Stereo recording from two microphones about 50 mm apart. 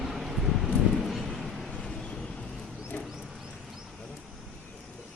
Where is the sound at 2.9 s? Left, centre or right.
Left.